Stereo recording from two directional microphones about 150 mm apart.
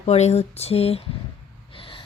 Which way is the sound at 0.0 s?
45° left (ahead or behind).